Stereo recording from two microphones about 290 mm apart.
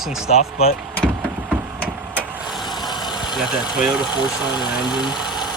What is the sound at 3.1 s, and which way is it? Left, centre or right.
Speech, centre.